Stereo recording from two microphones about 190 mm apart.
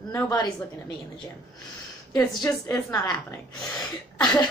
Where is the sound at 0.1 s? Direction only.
20° left (ahead or behind).